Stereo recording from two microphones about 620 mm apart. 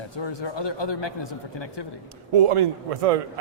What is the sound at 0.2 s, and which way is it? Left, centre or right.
Speech, left.